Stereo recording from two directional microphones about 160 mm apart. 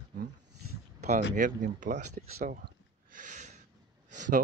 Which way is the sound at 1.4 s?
60° right (ahead or behind).